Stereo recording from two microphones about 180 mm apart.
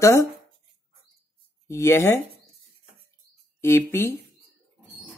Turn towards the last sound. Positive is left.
turn(degrees=15)  # may be behind; listen again after turning